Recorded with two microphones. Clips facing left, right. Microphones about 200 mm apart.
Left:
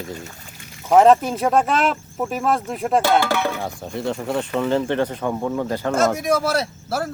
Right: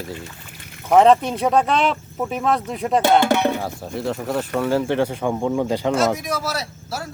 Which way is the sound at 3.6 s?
Centre (ahead or behind).